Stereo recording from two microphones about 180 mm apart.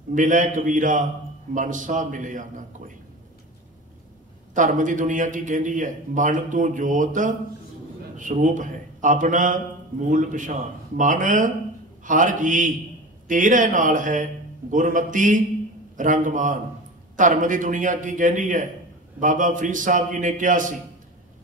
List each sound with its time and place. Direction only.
0.1 s a man's voice: 45° right (ahead or behind)
4.6 s a man's voice: 45° right (ahead or behind)